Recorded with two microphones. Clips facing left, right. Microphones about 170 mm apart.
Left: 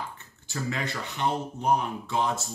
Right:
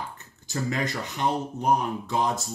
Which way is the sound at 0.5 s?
40° right (ahead or behind).